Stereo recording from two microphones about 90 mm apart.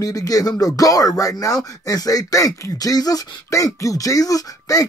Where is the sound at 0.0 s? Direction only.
40° left (ahead or behind).